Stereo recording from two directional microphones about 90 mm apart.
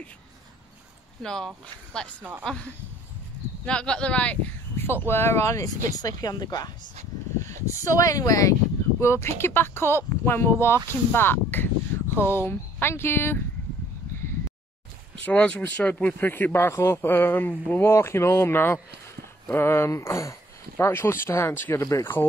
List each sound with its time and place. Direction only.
1.2 s speech: 5° left (ahead or behind)
4.8 s speech: 25° left (ahead or behind); by 6.7 s 50° left (ahead or behind)
7.4 s speech: 35° left (ahead or behind)
15.2 s speech: 15° left (ahead or behind)